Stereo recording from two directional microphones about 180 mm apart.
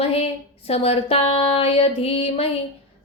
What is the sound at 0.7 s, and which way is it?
A woman's voice, 35° left (ahead or behind).